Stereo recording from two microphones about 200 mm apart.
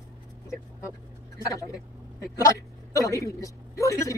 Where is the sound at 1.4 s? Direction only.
15° left (ahead or behind).